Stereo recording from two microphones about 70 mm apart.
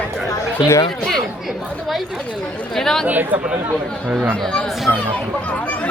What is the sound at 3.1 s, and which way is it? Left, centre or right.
Speech, right.